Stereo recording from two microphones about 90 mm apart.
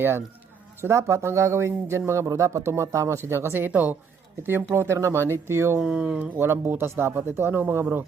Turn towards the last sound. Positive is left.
turn(degrees=-20)  # may be behind; listen again after turning